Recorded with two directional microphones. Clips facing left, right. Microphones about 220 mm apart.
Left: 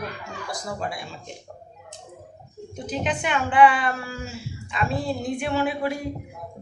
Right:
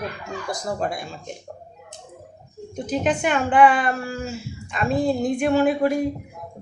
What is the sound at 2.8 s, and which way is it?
A woman's voice, 45° right (ahead or behind).